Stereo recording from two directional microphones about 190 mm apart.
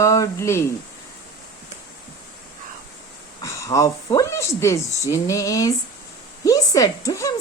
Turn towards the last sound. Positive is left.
turn(degrees=15)  # may be behind; listen again after turning